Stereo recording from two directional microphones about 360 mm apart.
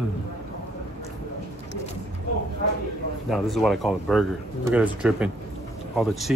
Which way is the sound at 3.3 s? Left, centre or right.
Centre.